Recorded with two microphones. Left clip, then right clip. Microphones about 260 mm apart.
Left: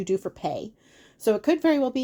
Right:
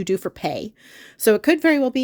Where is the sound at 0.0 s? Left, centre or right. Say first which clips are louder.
Right 4 dB; right.